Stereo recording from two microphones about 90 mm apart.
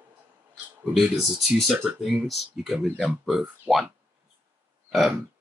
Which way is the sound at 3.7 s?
20° right (ahead or behind).